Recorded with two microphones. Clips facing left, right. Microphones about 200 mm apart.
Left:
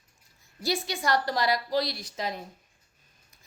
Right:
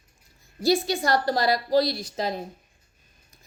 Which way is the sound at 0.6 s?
30° right (ahead or behind).